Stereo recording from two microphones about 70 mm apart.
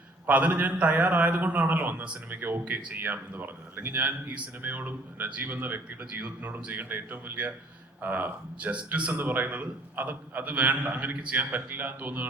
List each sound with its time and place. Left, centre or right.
0.3 s speech: right